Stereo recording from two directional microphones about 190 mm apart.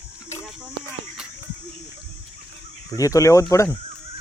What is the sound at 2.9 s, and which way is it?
Speech, 15° left (ahead or behind).